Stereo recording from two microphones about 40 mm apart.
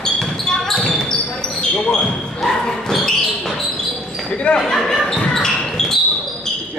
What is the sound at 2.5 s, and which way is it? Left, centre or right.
Basketball bounce, centre.